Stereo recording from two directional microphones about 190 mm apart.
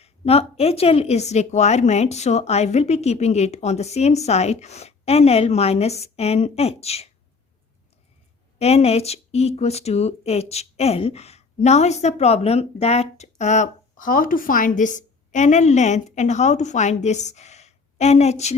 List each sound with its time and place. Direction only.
0.0 s a woman's voice: 30° left (ahead or behind)
8.5 s a woman's voice: 35° left (ahead or behind)